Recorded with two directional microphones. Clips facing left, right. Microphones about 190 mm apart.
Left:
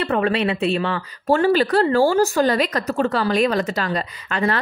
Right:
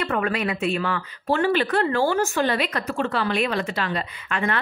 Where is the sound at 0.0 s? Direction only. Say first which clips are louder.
Left 4 dB; 30° left (ahead or behind).